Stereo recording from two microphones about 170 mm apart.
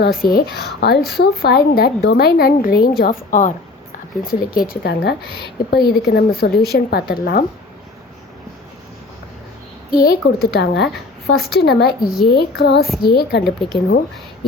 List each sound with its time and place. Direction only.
0.0 s a woman's voice: 60° left (ahead or behind)
9.9 s a woman's voice: 60° left (ahead or behind)
13.4 s speech: centre (ahead or behind)